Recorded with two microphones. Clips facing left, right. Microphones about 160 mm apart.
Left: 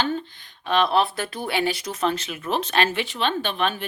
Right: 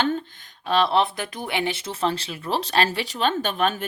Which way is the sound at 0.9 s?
20° right (ahead or behind).